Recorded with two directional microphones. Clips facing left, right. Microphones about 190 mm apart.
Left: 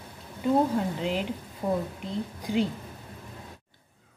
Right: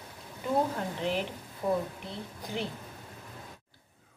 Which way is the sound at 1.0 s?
15° left (ahead or behind).